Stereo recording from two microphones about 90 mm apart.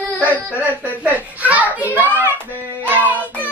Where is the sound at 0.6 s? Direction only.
20° right (ahead or behind).